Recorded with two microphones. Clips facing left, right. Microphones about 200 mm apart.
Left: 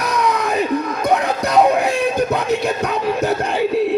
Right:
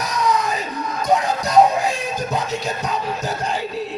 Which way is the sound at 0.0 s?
60° left (ahead or behind).